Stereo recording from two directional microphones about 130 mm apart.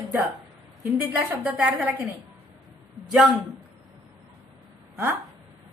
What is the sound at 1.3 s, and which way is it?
Speech, 10° right (ahead or behind).